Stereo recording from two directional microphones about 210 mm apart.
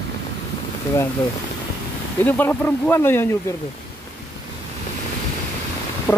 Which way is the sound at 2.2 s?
10° left (ahead or behind).